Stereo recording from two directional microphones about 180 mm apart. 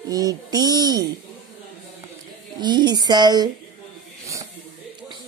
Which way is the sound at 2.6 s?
25° right (ahead or behind).